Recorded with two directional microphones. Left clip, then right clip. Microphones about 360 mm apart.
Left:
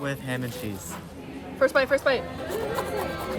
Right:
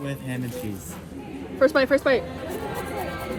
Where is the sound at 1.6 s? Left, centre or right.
Centre.